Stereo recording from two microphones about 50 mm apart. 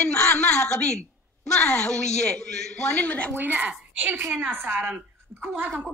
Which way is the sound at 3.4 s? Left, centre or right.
Right.